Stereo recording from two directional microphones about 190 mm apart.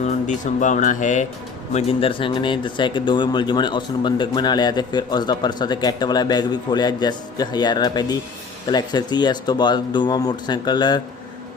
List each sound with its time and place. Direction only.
0.3 s speech: 40° left (ahead or behind)
1.7 s speech: 30° left (ahead or behind)